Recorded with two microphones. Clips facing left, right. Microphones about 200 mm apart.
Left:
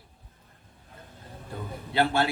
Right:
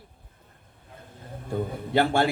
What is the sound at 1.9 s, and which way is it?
Speech, 50° right (ahead or behind).